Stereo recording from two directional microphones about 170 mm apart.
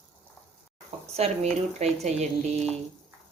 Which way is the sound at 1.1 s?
40° right (ahead or behind).